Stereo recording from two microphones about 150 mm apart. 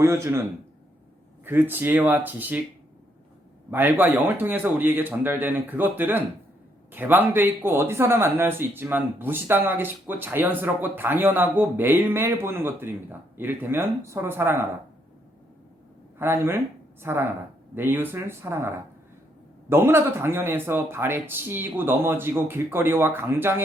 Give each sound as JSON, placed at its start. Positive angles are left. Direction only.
{"t": 0.0, "sound": "speech", "side_deg": -20}
{"t": 1.5, "sound": "speech", "side_deg": -15}
{"t": 3.7, "sound": "speech", "side_deg": -15}
{"t": 16.1, "sound": "speech", "side_deg": -15}
{"t": 19.7, "sound": "speech", "side_deg": -15}